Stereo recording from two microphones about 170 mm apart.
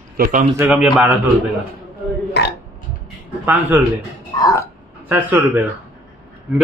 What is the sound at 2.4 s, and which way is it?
Burping, 80° left.